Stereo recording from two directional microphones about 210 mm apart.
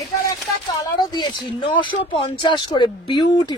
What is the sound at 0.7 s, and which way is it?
Speech, 20° left (ahead or behind).